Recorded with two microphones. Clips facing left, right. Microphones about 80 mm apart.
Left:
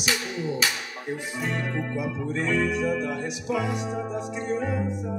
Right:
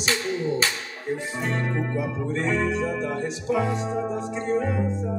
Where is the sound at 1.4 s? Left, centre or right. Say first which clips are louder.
Even; right.